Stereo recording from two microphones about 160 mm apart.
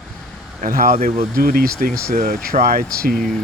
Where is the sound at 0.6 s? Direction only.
60° right (ahead or behind).